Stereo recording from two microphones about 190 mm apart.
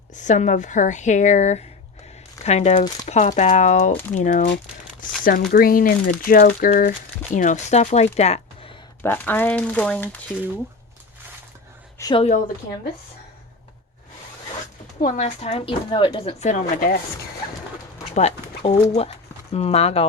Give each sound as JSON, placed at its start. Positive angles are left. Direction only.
{"t": 0.1, "sound": "speech", "side_deg": 40}
{"t": 9.0, "sound": "speech", "side_deg": 10}
{"t": 11.9, "sound": "a sound", "side_deg": 20}
{"t": 15.0, "sound": "speech", "side_deg": 40}
{"t": 18.1, "sound": "speech", "side_deg": 35}